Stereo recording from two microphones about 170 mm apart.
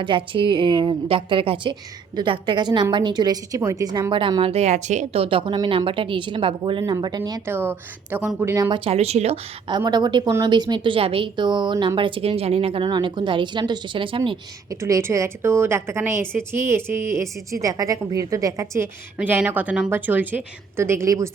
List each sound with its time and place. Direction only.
0.0 s a woman's voice: 30° right (ahead or behind); by 8.7 s 15° right (ahead or behind)
8.7 s a woman's voice: 35° right (ahead or behind); by 21.2 s 15° right (ahead or behind)